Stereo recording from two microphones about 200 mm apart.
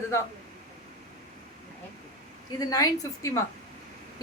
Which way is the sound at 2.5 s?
20° left (ahead or behind).